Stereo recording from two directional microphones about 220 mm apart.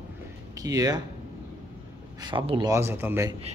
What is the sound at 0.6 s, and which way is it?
Speech, 15° right (ahead or behind).